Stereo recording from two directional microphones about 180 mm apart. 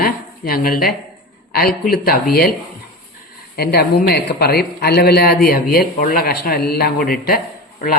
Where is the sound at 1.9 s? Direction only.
55° left (ahead or behind).